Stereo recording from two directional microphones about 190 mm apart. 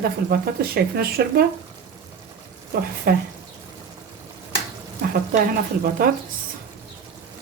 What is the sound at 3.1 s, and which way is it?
Speech, 50° right (ahead or behind).